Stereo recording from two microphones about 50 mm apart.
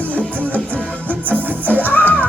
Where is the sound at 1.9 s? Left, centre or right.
Left.